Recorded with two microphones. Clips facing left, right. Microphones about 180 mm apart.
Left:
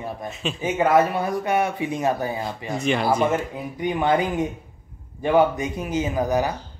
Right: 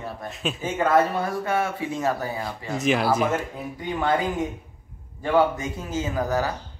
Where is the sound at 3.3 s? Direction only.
15° left (ahead or behind).